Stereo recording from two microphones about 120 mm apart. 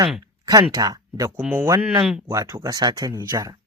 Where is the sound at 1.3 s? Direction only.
15° right (ahead or behind).